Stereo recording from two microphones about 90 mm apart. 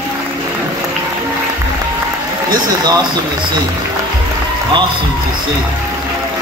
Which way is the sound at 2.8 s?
60° right (ahead or behind).